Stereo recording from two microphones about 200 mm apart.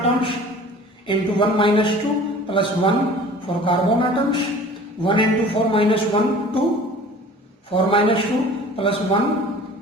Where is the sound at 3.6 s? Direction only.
25° left (ahead or behind).